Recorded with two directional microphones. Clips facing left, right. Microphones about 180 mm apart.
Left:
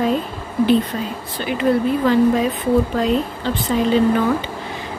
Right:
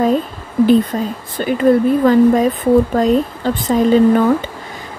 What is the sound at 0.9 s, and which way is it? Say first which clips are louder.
Speech: right 5 dB; 40° right (ahead or behind).